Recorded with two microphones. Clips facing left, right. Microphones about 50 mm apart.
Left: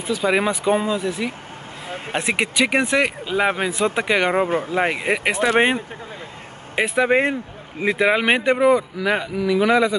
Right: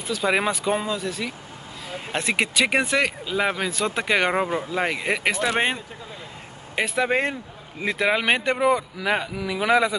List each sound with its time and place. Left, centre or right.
0.1 s a man's voice: centre
0.7 s speech: centre
2.5 s a man's voice: centre
2.9 s speech: left
4.1 s a man's voice: centre
4.5 s speech: left
4.7 s a man's voice: left; by 9.9 s centre